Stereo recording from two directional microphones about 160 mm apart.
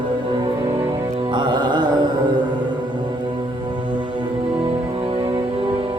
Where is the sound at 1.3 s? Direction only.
30° right (ahead or behind).